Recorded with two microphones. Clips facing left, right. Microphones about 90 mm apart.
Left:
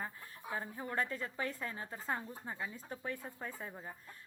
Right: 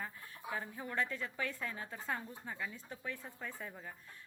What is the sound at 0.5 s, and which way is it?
Speech, 30° left (ahead or behind).